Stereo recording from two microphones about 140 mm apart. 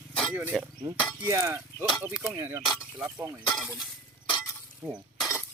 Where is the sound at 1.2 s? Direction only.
20° right (ahead or behind).